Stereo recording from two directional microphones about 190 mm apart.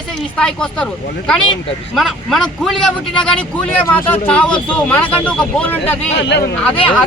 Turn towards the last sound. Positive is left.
turn(degrees=5)  # may be behind; listen again after turning